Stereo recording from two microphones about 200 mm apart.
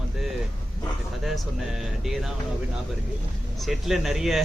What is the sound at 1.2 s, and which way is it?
Speech, centre (ahead or behind).